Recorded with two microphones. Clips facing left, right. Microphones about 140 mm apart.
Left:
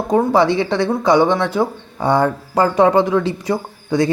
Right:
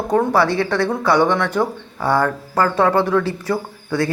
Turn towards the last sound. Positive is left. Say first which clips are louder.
# left 4 dB
turn(degrees=15)  # may be behind; listen again after turning